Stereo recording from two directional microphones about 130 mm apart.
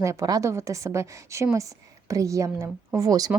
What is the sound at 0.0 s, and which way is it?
A woman's voice, 25° right (ahead or behind).